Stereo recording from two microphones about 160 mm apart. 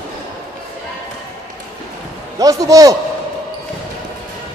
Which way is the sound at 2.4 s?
20° right (ahead or behind).